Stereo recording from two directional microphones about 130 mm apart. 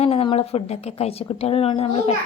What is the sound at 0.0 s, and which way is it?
A woman's voice, 45° left (ahead or behind).